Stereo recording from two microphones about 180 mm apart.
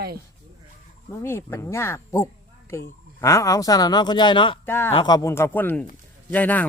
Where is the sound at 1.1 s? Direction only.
15° left (ahead or behind).